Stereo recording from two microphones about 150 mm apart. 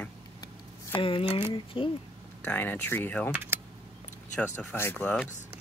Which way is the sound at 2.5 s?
10° left (ahead or behind).